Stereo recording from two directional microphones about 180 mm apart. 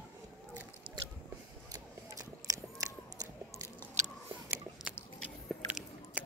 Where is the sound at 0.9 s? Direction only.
25° right (ahead or behind).